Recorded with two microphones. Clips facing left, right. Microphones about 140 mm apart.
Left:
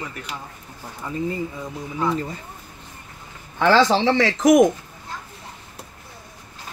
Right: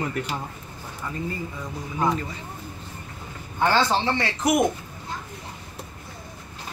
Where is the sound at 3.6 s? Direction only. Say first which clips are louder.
Left 5 dB; 90° left.